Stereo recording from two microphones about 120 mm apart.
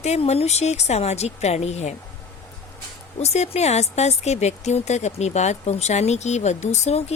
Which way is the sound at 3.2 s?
65° left (ahead or behind).